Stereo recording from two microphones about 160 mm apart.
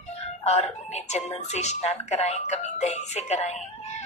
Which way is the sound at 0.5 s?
45° left (ahead or behind).